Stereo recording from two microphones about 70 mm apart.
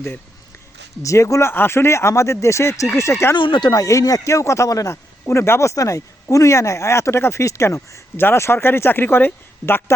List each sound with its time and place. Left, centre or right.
1.0 s speech: left
3.3 s speech: left
3.8 s speech: left
5.2 s speech: left
8.1 s speech: left